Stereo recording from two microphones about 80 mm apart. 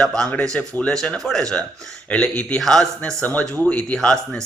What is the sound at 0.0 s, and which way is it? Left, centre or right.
Speech, centre.